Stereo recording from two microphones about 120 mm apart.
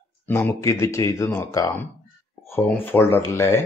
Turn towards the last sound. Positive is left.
turn(degrees=20)  # may be behind; listen again after turning